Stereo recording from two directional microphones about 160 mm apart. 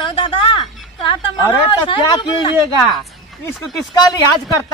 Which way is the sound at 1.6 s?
30° left (ahead or behind).